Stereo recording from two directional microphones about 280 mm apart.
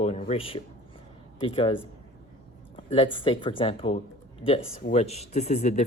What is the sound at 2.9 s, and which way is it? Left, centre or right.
Speech, centre.